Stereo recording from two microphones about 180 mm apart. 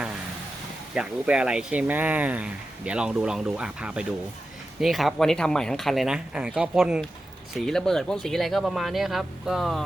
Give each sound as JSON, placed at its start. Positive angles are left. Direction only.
{"t": 0.9, "sound": "speech", "side_deg": -5}